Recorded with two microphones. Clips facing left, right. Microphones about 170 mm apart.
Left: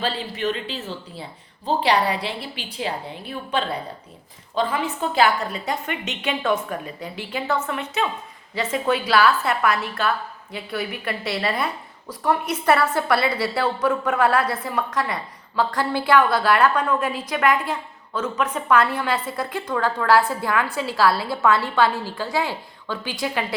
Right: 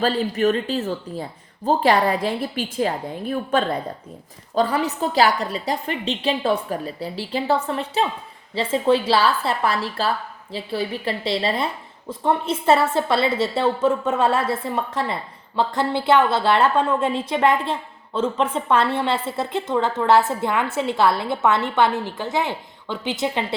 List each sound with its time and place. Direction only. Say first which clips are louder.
0.0 s a woman's voice: right 6 dB; 45° right (ahead or behind); by 23.6 s 25° right (ahead or behind)